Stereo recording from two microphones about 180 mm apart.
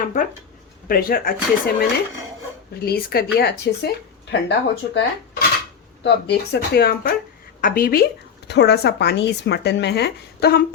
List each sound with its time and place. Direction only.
0.0 s a woman's voice: 45° left (ahead or behind); by 10.6 s 65° left (ahead or behind)